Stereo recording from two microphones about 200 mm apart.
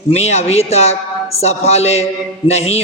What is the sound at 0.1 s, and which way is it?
Speech, 30° left (ahead or behind).